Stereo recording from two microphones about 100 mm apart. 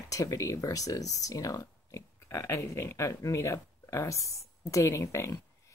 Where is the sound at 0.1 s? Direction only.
35° left (ahead or behind).